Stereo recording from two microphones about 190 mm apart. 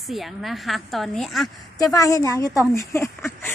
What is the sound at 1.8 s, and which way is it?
Speech, 15° left (ahead or behind).